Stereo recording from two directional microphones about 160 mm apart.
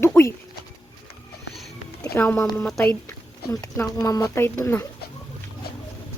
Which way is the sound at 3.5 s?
20° left (ahead or behind).